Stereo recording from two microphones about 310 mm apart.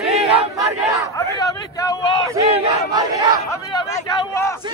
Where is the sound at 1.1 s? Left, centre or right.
Centre.